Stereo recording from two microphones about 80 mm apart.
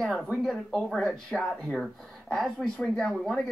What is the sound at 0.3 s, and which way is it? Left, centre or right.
Speech, centre.